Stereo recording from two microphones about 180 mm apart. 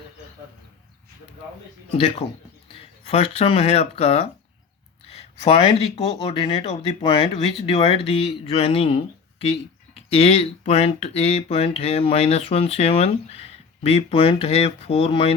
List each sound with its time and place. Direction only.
1.9 s speech: 35° left (ahead or behind)
2.7 s a sound: 35° left (ahead or behind)
3.3 s speech: 35° left (ahead or behind)